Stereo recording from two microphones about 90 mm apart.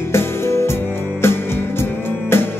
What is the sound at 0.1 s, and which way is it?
Music, 30° left (ahead or behind).